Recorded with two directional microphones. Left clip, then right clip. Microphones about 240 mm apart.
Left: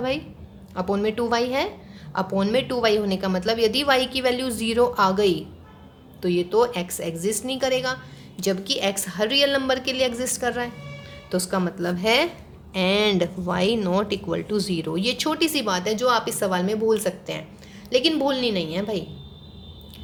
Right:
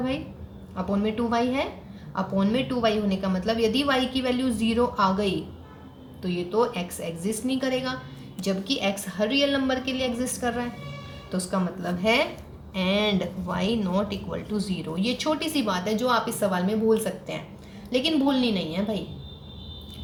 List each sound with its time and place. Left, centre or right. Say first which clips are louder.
0.8 s a woman's voice: left 4 dB; left